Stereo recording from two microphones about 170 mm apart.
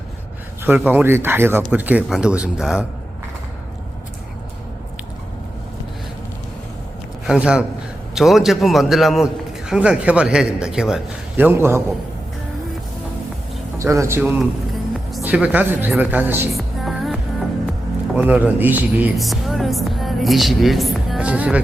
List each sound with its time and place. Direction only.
0.6 s speech: 10° right (ahead or behind)
7.3 s a man's voice: 5° right (ahead or behind)
13.7 s a man's voice: 15° right (ahead or behind)
16.5 s music: centre (ahead or behind)
18.1 s speech: 10° right (ahead or behind)